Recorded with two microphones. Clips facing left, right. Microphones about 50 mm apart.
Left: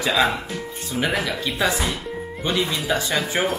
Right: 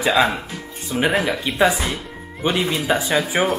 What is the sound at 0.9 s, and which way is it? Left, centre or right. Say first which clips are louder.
Speech: right 4 dB; right.